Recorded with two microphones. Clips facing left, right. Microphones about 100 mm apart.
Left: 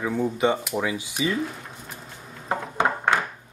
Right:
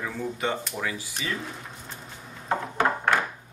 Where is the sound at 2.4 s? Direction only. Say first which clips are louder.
Left 1 dB; 20° left (ahead or behind).